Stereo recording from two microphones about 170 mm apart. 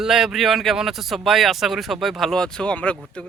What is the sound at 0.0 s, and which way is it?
Speech, 5° right (ahead or behind).